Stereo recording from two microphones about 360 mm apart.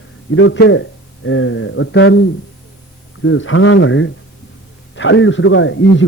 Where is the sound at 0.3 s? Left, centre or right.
Left.